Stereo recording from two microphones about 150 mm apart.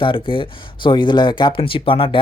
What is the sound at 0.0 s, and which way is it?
Speech, 35° left (ahead or behind).